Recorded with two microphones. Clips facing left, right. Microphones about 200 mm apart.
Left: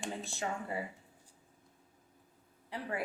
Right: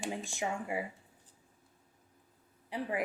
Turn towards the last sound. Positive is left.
turn(degrees=-15)  # may be behind; listen again after turning